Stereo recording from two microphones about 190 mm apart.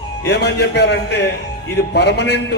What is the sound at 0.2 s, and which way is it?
A man's voice, 60° left (ahead or behind).